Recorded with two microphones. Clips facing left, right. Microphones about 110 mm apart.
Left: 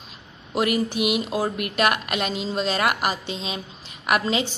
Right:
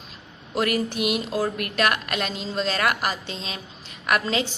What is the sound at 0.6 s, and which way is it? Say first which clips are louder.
Speech: left 2 dB; 15° left (ahead or behind).